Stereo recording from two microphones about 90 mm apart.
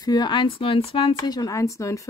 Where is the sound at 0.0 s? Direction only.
50° left (ahead or behind).